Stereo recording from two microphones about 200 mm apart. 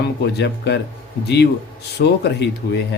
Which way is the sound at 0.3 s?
55° left (ahead or behind).